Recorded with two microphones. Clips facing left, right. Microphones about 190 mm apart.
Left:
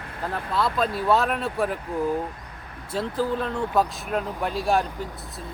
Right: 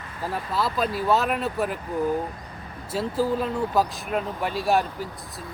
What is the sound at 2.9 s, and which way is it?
Speech, 5° right (ahead or behind).